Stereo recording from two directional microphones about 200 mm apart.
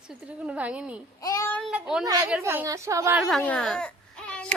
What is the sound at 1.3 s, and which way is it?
Child singing, 15° left (ahead or behind).